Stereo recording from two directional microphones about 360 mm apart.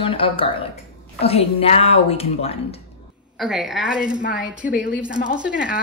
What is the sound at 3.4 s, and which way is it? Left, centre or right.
A woman's voice, centre.